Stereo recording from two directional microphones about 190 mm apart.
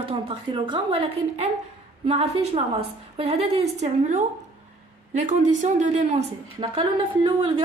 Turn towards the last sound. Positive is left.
turn(degrees=-25)  # may be behind; listen again after turning